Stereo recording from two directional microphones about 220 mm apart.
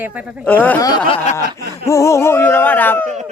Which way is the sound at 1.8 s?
15° left (ahead or behind).